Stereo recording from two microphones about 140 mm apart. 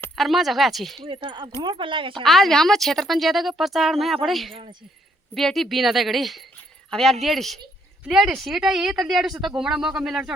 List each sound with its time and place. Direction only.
0.2 s a woman's voice: centre (ahead or behind)
1.0 s speech: 35° right (ahead or behind)
2.2 s a woman's voice: centre (ahead or behind)
4.5 s speech: 40° right (ahead or behind)
5.3 s a woman's voice: centre (ahead or behind)